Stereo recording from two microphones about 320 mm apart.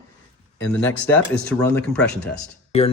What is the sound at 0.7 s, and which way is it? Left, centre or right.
Speech, centre.